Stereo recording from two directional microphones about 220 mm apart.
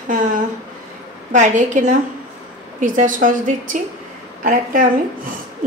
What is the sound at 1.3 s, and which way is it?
A woman's voice, 35° right (ahead or behind).